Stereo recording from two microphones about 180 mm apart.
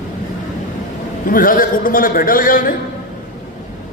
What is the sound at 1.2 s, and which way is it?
A man's voice, 50° left (ahead or behind).